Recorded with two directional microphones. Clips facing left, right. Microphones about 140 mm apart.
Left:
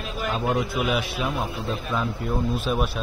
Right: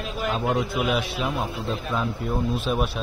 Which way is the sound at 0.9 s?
Centre (ahead or behind).